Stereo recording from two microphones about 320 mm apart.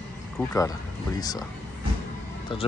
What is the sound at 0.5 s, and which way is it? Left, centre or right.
Speech, centre.